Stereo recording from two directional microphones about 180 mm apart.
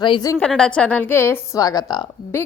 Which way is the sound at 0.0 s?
25° left (ahead or behind).